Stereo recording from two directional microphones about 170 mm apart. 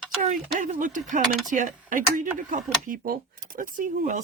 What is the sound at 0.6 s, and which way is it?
Speech, 50° right (ahead or behind).